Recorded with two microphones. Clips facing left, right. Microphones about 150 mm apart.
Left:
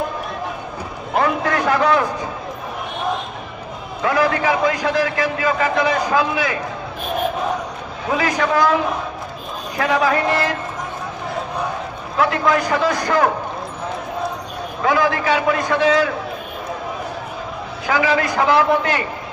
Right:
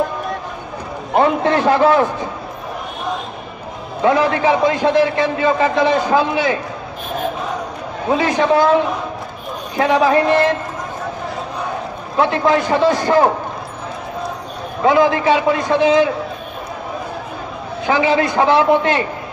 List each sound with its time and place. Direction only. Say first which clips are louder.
1.1 s a man's voice: right 4 dB; 25° right (ahead or behind)
4.0 s a man's voice: right 4 dB; 25° right (ahead or behind)
8.2 s a man's voice: right 3 dB; 25° right (ahead or behind)
9.8 s a man's voice: right 4 dB; 25° right (ahead or behind)
12.2 s a man's voice: right 3 dB; 25° right (ahead or behind)
14.9 s a man's voice: right 5 dB; 25° right (ahead or behind)
17.8 s a man's voice: right 3 dB; 25° right (ahead or behind)